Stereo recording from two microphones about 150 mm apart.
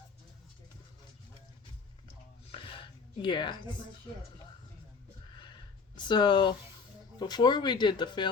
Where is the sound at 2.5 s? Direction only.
35° left (ahead or behind).